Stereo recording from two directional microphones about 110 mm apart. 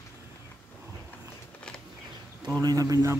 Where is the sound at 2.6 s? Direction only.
35° right (ahead or behind).